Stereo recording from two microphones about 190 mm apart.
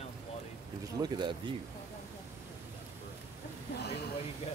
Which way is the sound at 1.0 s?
20° right (ahead or behind).